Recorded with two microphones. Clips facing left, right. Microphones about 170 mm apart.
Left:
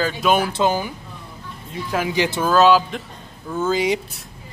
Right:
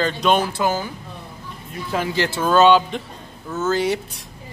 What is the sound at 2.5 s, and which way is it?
Speech, centre (ahead or behind).